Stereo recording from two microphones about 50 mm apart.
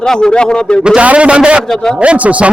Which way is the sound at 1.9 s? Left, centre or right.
Right.